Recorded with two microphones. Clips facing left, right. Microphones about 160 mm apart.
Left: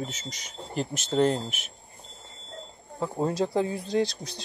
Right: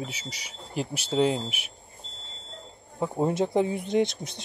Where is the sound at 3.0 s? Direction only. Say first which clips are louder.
Right 2 dB; 15° right (ahead or behind).